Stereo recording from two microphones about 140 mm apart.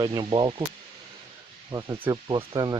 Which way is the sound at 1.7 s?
40° right (ahead or behind).